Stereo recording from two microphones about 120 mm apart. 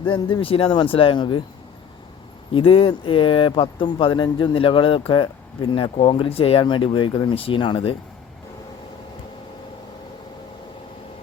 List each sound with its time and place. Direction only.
0.0 s speech: 45° left (ahead or behind)
2.5 s speech: 50° left (ahead or behind)